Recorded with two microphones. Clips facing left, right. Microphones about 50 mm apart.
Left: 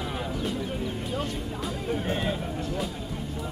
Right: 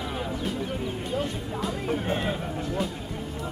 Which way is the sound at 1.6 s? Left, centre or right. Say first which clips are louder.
Right 3 dB; centre.